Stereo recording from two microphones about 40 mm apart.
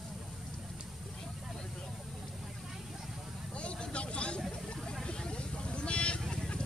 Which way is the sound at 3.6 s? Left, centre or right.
Left.